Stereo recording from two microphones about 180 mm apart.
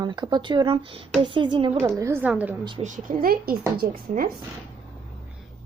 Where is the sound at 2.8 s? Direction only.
45° right (ahead or behind).